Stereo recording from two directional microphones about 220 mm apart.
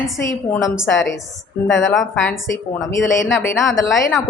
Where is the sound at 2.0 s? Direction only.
Centre (ahead or behind).